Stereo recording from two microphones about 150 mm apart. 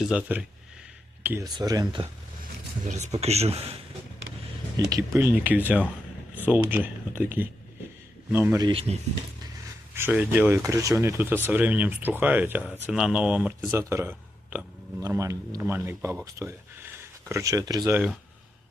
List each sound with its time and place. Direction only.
0.0 s speech: 5° right (ahead or behind)
1.5 s speech: 25° right (ahead or behind)
2.8 s speech: 50° right (ahead or behind)
4.9 s speech: 20° right (ahead or behind)
8.3 s speech: 15° right (ahead or behind)
8.7 s speech: 40° right (ahead or behind)
9.9 s speech: 15° right (ahead or behind)